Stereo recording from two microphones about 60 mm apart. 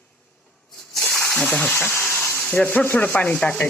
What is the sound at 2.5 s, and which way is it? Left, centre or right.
Sanding, left.